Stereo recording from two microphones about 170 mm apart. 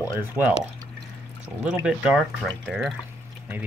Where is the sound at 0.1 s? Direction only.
10° right (ahead or behind).